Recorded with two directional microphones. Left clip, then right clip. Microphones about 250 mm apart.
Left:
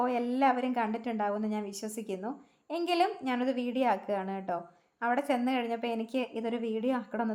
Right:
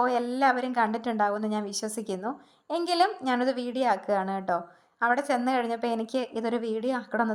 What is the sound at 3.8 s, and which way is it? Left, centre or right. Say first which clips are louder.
A woman's voice: right 5 dB; centre.